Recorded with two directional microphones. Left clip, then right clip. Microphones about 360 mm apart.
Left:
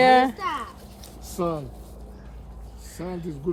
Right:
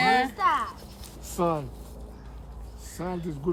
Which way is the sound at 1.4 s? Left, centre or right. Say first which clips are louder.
Right 1 dB; centre.